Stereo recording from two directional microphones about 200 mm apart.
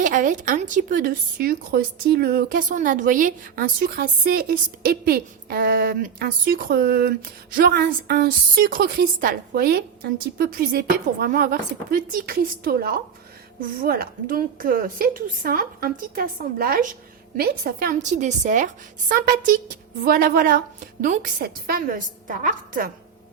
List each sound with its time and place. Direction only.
0.0 s speech: 40° right (ahead or behind)